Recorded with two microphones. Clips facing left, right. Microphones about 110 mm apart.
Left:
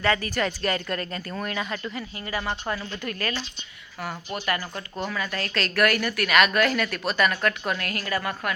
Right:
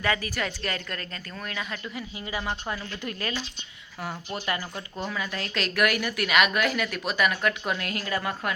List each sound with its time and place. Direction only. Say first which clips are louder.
0.0 s speech: left 4 dB; 10° right (ahead or behind)
1.9 s a woman's voice: left 2 dB; 10° right (ahead or behind)
5.0 s a woman's voice: left 2 dB; 15° right (ahead or behind)